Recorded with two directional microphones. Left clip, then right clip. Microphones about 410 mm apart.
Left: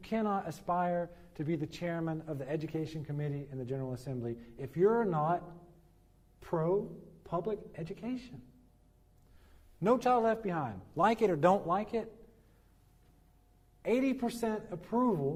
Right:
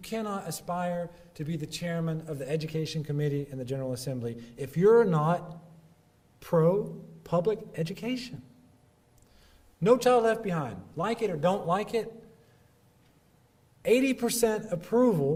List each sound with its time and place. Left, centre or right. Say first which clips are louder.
0.0 s a man's voice: even; left
2.2 s speech: right 5 dB; left; by 5.4 s centre
6.4 s speech: right 7 dB; centre
9.8 s a man's voice: right 6 dB; centre; by 10.8 s left
10.9 s a man's voice: left 2 dB; left
11.7 s a man's voice: right 5 dB; centre
13.8 s speech: right 7 dB; centre